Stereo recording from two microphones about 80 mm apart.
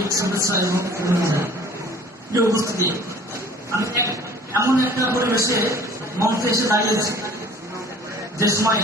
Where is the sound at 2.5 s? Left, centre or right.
Right.